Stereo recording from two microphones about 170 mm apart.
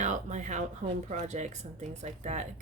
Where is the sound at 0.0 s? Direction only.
45° right (ahead or behind).